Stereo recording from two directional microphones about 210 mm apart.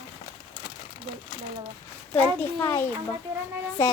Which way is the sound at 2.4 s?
10° left (ahead or behind).